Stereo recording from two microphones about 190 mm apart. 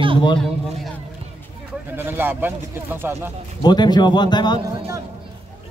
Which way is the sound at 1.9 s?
10° right (ahead or behind).